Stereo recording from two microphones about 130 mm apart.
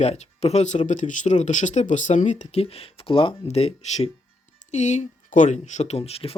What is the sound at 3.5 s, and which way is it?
Speech, 55° left (ahead or behind).